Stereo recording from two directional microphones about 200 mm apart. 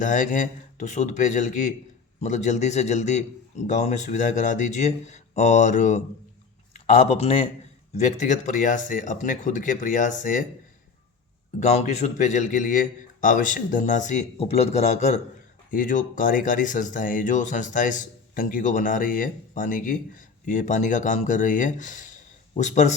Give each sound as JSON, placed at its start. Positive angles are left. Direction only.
{"t": 0.0, "sound": "speech", "side_deg": 40}
{"t": 11.6, "sound": "speech", "side_deg": 35}